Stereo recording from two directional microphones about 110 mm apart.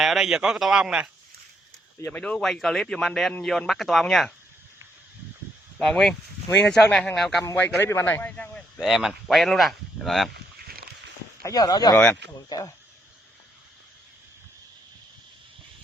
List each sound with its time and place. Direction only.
0.0 s speech: 5° right (ahead or behind)
2.1 s speech: 10° left (ahead or behind)
5.8 s speech: 5° left (ahead or behind)
7.5 s a man's voice: 20° left (ahead or behind)
8.8 s speech: 5° right (ahead or behind)
11.4 s speech: 35° left (ahead or behind)